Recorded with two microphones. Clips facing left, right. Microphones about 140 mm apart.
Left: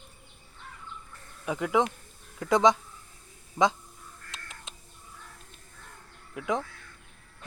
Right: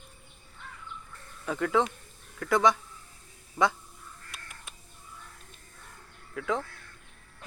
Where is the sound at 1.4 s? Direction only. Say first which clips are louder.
Left 1 dB; 15° left (ahead or behind).